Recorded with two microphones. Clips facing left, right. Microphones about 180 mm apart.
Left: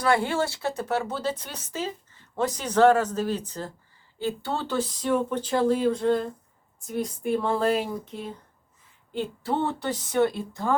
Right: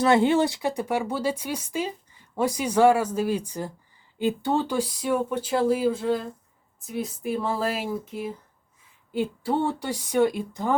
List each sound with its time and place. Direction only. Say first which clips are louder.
0.0 s speech: right 4 dB; 20° right (ahead or behind)